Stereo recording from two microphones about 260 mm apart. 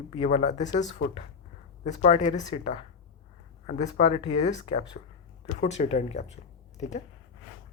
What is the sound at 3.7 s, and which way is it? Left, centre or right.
Speech, left.